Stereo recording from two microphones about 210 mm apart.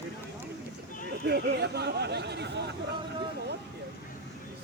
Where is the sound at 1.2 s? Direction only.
50° right (ahead or behind).